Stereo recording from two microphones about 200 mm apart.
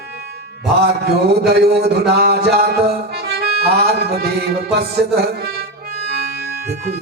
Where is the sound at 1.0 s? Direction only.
55° right (ahead or behind).